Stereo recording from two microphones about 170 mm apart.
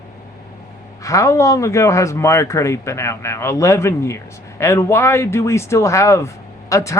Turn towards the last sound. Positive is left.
turn(degrees=20)  # may be behind; listen again after turning